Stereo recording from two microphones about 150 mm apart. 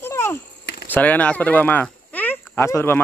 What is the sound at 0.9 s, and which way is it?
Speech, 10° left (ahead or behind).